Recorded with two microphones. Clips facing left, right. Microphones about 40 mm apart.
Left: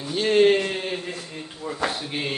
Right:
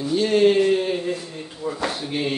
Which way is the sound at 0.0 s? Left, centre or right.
Left.